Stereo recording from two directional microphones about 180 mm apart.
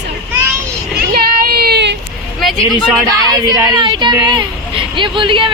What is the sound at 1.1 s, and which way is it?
Child singing, 60° right (ahead or behind).